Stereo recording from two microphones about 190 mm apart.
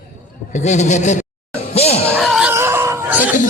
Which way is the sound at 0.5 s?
40° left (ahead or behind).